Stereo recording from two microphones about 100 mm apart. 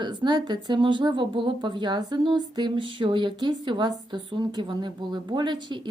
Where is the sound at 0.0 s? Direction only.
45° right (ahead or behind).